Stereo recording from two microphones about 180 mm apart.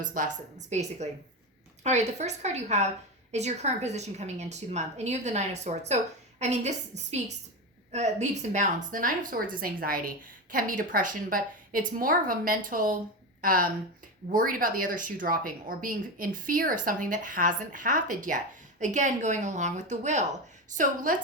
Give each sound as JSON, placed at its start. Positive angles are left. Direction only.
{"t": 0.0, "sound": "a woman's voice", "side_deg": -45}